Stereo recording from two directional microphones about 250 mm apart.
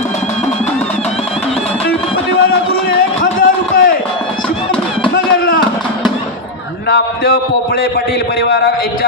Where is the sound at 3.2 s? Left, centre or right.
Left.